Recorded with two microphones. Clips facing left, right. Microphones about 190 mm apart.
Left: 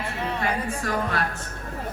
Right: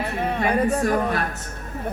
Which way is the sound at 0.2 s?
55° right (ahead or behind).